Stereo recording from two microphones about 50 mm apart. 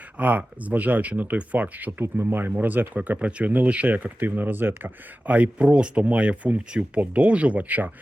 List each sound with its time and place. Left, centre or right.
0.2 s speech: right
2.1 s speech: right